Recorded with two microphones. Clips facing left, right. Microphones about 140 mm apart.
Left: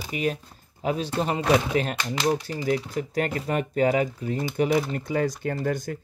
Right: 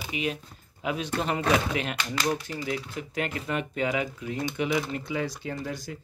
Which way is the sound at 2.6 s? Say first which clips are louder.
Left 6 dB; 40° left (ahead or behind).